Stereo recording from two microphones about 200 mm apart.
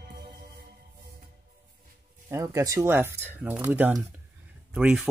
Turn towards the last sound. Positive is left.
turn(degrees=-5)  # may be behind; listen again after turning